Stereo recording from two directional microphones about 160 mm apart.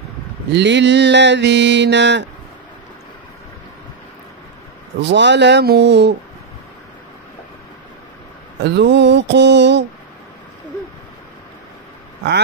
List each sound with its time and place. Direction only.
0.5 s mantra: 90° right
5.0 s mantra: 90° right
8.6 s mantra: 90° right